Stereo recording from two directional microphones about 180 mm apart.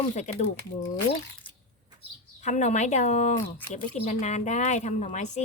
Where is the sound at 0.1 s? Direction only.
40° left (ahead or behind).